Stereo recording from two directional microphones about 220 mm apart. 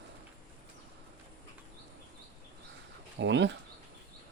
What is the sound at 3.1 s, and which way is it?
Speech, 55° right (ahead or behind).